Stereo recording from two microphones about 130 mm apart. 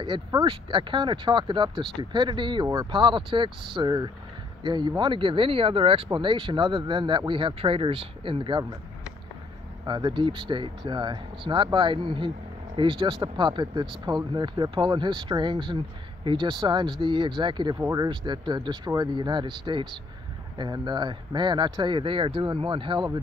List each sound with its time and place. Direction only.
0.0 s speech: 35° right (ahead or behind)
9.8 s speech: 35° right (ahead or behind)